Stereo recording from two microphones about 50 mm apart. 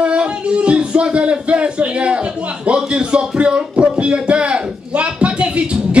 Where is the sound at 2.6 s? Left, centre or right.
Centre.